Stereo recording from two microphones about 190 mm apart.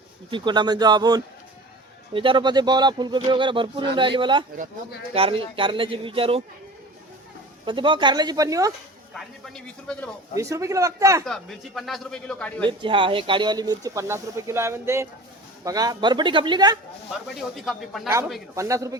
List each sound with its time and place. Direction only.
0.3 s speech: 25° right (ahead or behind)
7.6 s speech: 25° right (ahead or behind)
9.1 s speech: centre (ahead or behind)
10.3 s speech: 15° right (ahead or behind)
11.3 s speech: centre (ahead or behind)
12.6 s speech: 25° right (ahead or behind)
17.7 s speech: centre (ahead or behind)
18.5 s speech: 15° right (ahead or behind)